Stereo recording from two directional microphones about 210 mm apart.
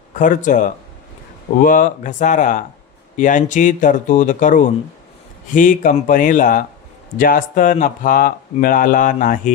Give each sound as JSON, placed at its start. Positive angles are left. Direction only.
{"t": 0.1, "sound": "speech", "side_deg": 40}